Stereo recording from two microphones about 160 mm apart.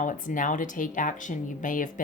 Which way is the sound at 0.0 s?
55° left (ahead or behind).